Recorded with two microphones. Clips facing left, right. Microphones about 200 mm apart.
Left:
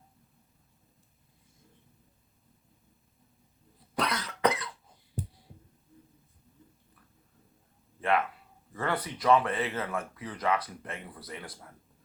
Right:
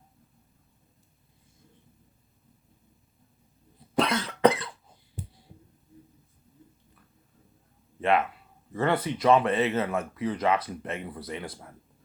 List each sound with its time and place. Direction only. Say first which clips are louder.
3.9 s cough: right 6 dB; 25° right (ahead or behind)
8.7 s speech: right 6 dB; 25° right (ahead or behind)